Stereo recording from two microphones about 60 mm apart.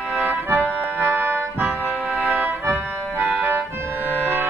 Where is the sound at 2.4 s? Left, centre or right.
Right.